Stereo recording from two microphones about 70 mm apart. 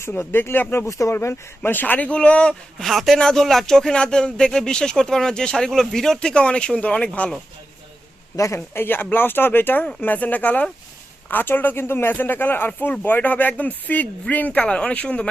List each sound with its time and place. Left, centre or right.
0.0 s speech: left
0.9 s speech: left
1.1 s speech: left; by 7.3 s centre
8.4 s speech: left
8.7 s speech: left